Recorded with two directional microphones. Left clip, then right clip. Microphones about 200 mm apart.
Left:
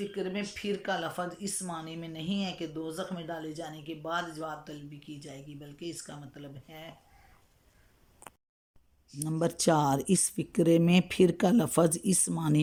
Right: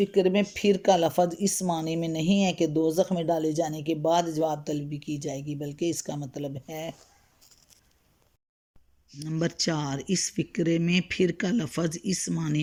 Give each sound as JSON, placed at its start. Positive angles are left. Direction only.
{"t": 0.0, "sound": "speech", "side_deg": -50}
{"t": 9.1, "sound": "speech", "side_deg": 15}